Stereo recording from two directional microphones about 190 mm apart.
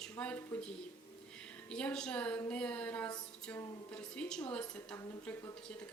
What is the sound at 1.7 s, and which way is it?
Speech, 5° left (ahead or behind).